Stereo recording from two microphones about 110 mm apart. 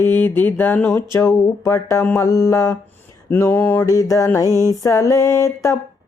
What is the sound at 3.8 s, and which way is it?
Mantra, 30° left (ahead or behind).